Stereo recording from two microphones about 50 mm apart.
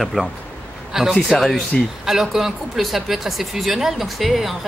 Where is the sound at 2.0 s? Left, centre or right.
Centre.